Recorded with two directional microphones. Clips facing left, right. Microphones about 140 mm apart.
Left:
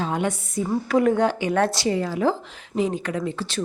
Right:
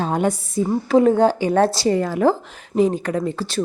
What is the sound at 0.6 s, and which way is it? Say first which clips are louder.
Speech: right 5 dB; 25° right (ahead or behind).